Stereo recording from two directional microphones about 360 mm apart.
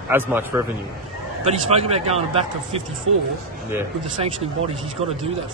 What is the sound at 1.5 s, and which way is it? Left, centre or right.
A man's voice, centre.